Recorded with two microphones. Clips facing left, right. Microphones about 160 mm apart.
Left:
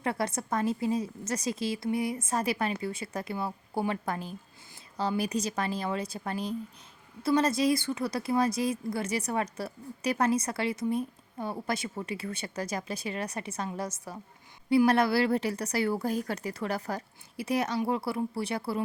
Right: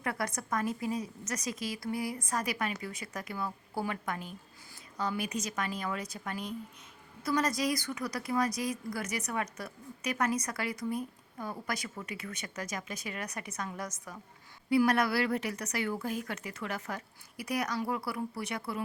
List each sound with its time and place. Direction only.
0.0 s a woman's voice: 25° left (ahead or behind)